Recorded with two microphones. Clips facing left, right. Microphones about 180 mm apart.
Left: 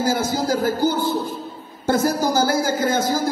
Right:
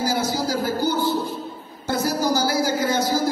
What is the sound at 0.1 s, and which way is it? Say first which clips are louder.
Music: left 2 dB; 50° left (ahead or behind).